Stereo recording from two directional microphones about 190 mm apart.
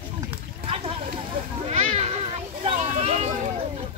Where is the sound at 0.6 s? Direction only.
30° right (ahead or behind).